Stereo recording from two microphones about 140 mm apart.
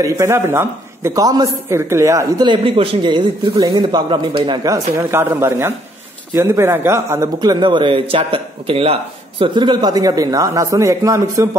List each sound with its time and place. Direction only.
0.0 s a man's voice: 20° right (ahead or behind)
4.9 s a man's voice: 15° right (ahead or behind)
7.3 s speech: 35° right (ahead or behind)